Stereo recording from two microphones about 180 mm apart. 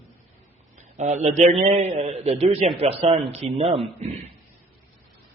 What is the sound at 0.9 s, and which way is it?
A man's voice, 40° right (ahead or behind).